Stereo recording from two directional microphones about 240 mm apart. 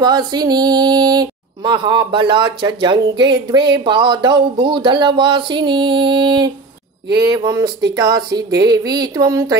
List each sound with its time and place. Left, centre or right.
0.0 s speech: centre